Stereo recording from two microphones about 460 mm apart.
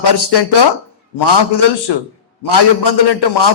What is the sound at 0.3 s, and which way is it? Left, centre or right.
A man's voice, left.